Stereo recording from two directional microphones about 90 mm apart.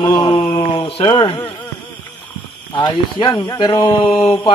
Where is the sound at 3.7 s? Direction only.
40° left (ahead or behind).